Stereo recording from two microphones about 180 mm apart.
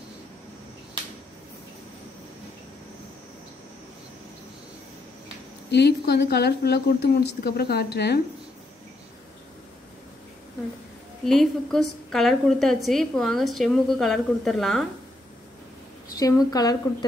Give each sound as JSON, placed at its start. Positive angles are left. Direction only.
{"t": 5.7, "sound": "a woman's voice", "side_deg": 70}
{"t": 11.2, "sound": "a woman's voice", "side_deg": 0}
{"t": 16.2, "sound": "a woman's voice", "side_deg": 20}